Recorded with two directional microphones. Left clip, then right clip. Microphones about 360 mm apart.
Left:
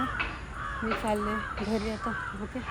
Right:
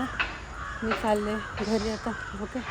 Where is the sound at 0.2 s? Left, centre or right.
Centre.